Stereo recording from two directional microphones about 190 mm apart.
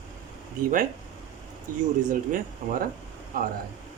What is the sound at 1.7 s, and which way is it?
Speech, 45° right (ahead or behind).